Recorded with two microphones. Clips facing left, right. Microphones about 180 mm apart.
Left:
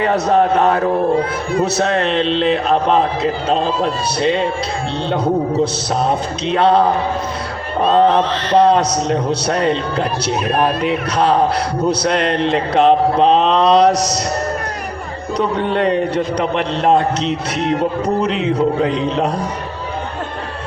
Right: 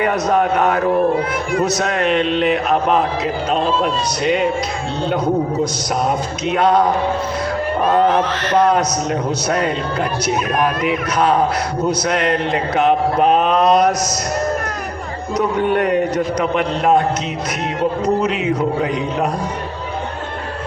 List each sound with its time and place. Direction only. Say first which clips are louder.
0.0 s a man's voice: left 2 dB; 30° left (ahead or behind)
6.4 s a man's voice: left 1 dB; 30° left (ahead or behind)
7.9 s a man's voice: left 3 dB; 30° left (ahead or behind)
15.4 s a man's voice: right 1 dB; 30° left (ahead or behind)
18.2 s a man's voice: left 1 dB; 10° right (ahead or behind)
18.8 s a man's voice: left 2 dB; 30° left (ahead or behind)